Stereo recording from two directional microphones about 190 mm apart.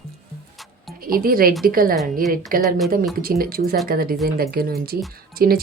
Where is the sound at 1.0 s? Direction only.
50° right (ahead or behind).